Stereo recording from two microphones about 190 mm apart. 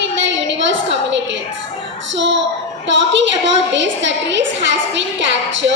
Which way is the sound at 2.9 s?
70° right (ahead or behind).